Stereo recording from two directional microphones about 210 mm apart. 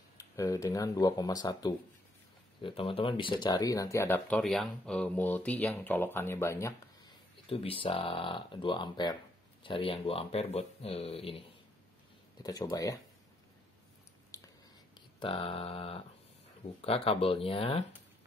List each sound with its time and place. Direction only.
0.4 s speech: 15° left (ahead or behind)
7.4 s speech: 25° left (ahead or behind)
12.4 s speech: 15° left (ahead or behind)
14.3 s a sound: 15° left (ahead or behind)
15.1 s speech: 25° left (ahead or behind)